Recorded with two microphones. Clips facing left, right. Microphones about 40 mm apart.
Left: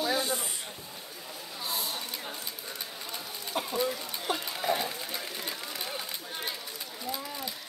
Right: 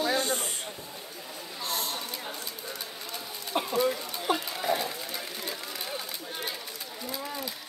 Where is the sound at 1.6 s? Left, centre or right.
Right.